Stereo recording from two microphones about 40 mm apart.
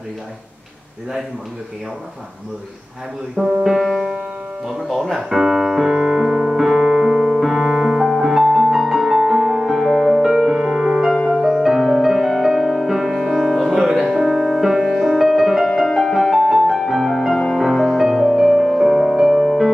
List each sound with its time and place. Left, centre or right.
3.6 s music: centre
5.1 s piano: centre
8.5 s music: centre
9.1 s music: right
9.7 s music: centre
10.0 s music: centre
18.2 s music: centre